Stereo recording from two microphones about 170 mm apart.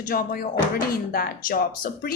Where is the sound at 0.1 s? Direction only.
55° left (ahead or behind).